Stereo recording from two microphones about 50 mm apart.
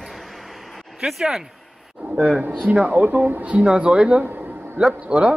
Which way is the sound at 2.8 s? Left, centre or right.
Right.